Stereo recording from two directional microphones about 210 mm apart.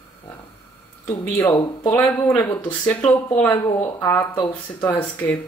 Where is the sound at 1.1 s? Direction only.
15° left (ahead or behind).